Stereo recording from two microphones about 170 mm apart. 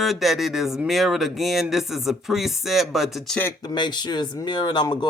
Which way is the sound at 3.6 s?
25° left (ahead or behind).